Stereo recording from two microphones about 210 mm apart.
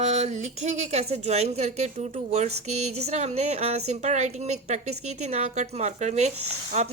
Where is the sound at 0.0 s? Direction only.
30° right (ahead or behind).